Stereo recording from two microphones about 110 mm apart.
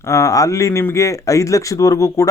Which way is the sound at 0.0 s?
30° left (ahead or behind).